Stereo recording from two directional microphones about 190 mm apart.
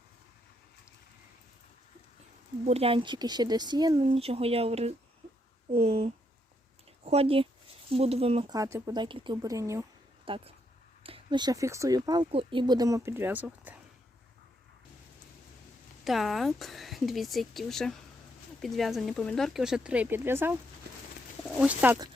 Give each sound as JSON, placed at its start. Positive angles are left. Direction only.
{"t": 2.6, "sound": "speech", "side_deg": -30}
{"t": 8.5, "sound": "speech", "side_deg": -15}
{"t": 10.2, "sound": "speech", "side_deg": -25}
{"t": 16.0, "sound": "speech", "side_deg": 0}